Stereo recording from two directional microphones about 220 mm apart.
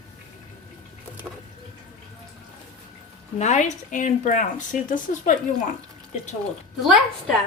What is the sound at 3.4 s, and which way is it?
A woman's voice, 30° left (ahead or behind).